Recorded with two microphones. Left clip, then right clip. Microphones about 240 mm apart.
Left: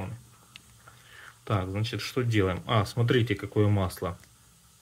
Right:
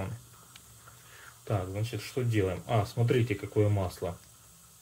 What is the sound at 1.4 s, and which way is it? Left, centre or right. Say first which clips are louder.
Speech: left 3 dB; left.